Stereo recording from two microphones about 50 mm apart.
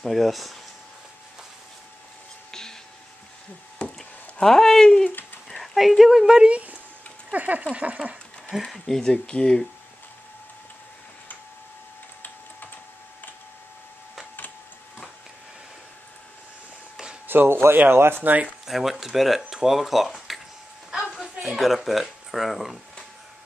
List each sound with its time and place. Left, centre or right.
0.0 s speech: centre
2.5 s whispering: centre
3.8 s a sound: left
4.4 s speech: centre
5.6 s speech: centre
6.5 s speech: right
7.3 s a sound: right
7.7 s speech: right
8.7 s speech: centre
9.0 s speech: centre
17.3 s speech: right
18.7 s speech: centre